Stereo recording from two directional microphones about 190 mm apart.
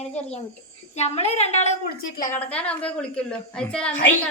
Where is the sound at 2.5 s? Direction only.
5° left (ahead or behind).